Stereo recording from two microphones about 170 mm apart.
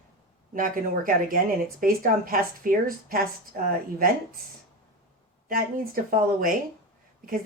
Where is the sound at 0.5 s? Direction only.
55° right (ahead or behind).